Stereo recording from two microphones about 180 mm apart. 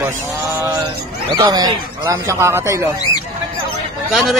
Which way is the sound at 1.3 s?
20° right (ahead or behind).